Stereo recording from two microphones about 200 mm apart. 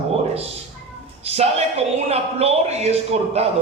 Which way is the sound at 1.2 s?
30° right (ahead or behind).